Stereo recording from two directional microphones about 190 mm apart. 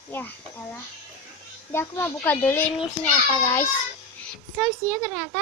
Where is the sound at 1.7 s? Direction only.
10° left (ahead or behind).